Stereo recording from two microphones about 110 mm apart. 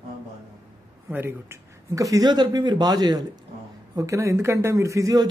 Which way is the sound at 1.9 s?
30° right (ahead or behind).